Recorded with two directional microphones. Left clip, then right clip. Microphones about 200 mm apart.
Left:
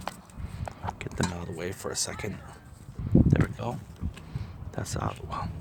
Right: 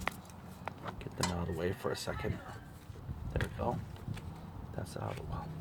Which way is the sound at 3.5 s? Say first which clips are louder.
Left 1 dB; 50° left (ahead or behind).